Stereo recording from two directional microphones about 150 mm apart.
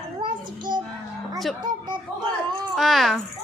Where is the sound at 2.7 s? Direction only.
Centre (ahead or behind).